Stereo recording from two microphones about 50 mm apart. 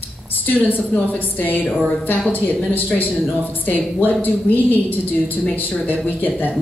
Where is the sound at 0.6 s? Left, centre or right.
Left.